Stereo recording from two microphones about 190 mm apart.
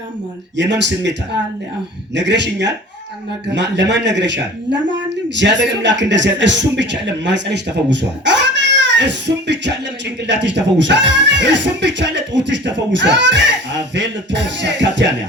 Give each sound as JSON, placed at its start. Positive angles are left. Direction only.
{"t": 0.5, "sound": "speech", "side_deg": -70}
{"t": 2.1, "sound": "speech", "side_deg": -65}